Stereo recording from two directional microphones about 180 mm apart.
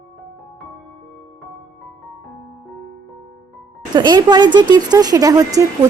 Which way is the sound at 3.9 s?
25° right (ahead or behind).